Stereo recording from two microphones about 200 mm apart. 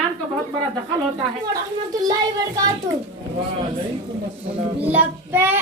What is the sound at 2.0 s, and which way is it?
Speech, 20° right (ahead or behind).